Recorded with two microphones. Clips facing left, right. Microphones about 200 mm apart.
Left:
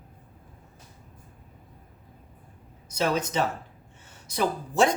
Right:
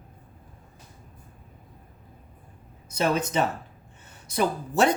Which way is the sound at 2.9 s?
55° right (ahead or behind).